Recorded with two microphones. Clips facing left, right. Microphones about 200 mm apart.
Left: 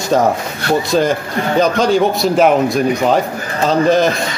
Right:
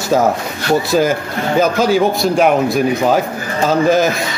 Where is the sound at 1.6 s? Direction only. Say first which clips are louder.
Even; 5° right (ahead or behind).